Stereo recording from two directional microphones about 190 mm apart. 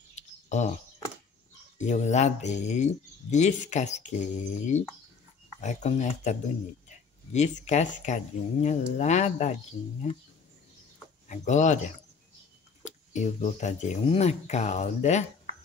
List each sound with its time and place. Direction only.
0.1 s a sound: 35° left (ahead or behind)
1.8 s speech: 40° left (ahead or behind)
11.2 s speech: 40° left (ahead or behind)